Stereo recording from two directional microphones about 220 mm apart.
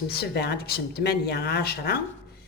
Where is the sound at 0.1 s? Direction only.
45° left (ahead or behind).